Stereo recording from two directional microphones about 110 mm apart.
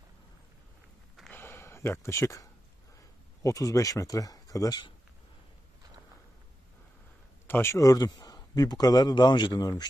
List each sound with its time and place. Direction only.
1.3 s a sound: 20° left (ahead or behind)
3.4 s a man's voice: 30° left (ahead or behind)
7.4 s speech: 20° left (ahead or behind)
7.8 s a man's voice: 35° left (ahead or behind)